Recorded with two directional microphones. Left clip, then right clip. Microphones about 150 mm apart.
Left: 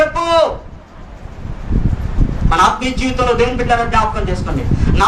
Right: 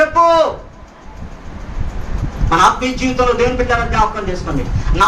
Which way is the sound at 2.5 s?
20° left (ahead or behind).